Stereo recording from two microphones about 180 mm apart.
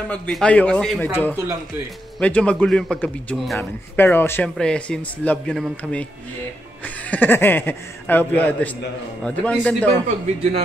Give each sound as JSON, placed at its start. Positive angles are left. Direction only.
{"t": 0.1, "sound": "a man's voice", "side_deg": 5}
{"t": 2.1, "sound": "a man's voice", "side_deg": 5}
{"t": 7.1, "sound": "a man's voice", "side_deg": 10}
{"t": 10.0, "sound": "a man's voice", "side_deg": -35}